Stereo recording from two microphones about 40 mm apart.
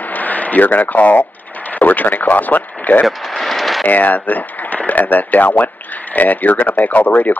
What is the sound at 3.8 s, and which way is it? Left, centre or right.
Speech, left.